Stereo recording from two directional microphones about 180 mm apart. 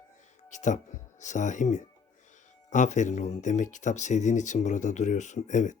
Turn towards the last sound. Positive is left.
turn(degrees=40)  # may be behind; listen again after turning